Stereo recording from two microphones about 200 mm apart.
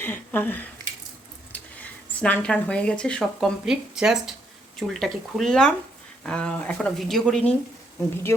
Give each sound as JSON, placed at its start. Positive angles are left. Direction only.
{"t": 0.0, "sound": "speech", "side_deg": 10}
{"t": 8.3, "sound": "speech", "side_deg": 15}